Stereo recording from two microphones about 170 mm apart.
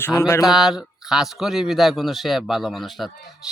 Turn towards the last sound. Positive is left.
turn(degrees=0)  # may be behind; listen again after turning